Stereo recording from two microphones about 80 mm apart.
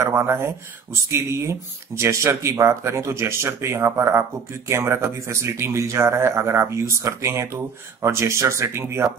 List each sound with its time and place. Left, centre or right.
0.0 s speech: right